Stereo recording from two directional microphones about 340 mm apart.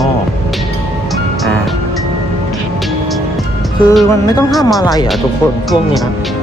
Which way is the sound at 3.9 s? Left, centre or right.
Centre.